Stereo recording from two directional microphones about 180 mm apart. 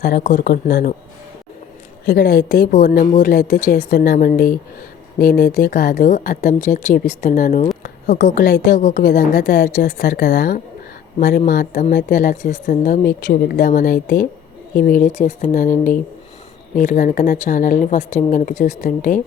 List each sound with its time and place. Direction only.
0.2 s speech: 50° left (ahead or behind)
2.0 s a woman's voice: 55° left (ahead or behind)
8.8 s speech: 45° left (ahead or behind)